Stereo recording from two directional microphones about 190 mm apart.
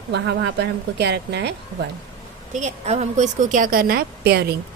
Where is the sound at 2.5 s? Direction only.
35° right (ahead or behind).